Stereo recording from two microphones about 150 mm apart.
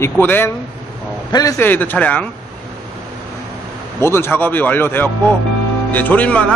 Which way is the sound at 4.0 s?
15° left (ahead or behind).